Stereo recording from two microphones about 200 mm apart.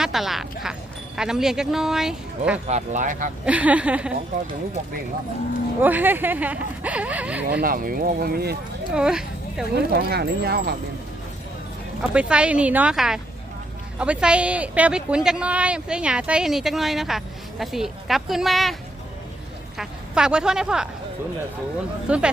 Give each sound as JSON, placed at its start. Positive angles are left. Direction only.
{"t": 0.0, "sound": "speech", "side_deg": 0}
{"t": 2.6, "sound": "speech", "side_deg": -35}
{"t": 3.4, "sound": "speech", "side_deg": -5}
{"t": 5.8, "sound": "speech", "side_deg": -10}
{"t": 7.6, "sound": "speech", "side_deg": -45}
{"t": 9.0, "sound": "speech", "side_deg": -5}
{"t": 9.7, "sound": "speech", "side_deg": -55}
{"t": 12.1, "sound": "a woman's voice", "side_deg": -5}
{"t": 22.1, "sound": "speech", "side_deg": -5}